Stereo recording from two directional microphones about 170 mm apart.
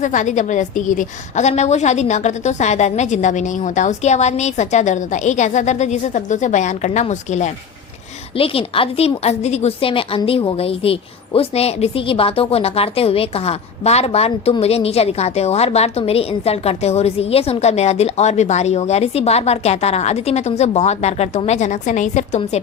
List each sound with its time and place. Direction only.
0.0 s a woman's voice: 45° left (ahead or behind)
8.4 s a woman's voice: 35° left (ahead or behind)